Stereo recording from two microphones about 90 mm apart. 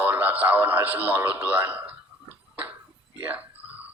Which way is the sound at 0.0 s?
20° right (ahead or behind).